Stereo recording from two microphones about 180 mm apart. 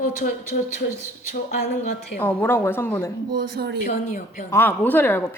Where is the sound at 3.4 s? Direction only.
60° right (ahead or behind).